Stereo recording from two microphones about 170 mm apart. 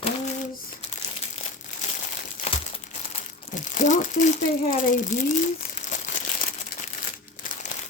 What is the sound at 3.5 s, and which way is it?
Speech, 45° left (ahead or behind).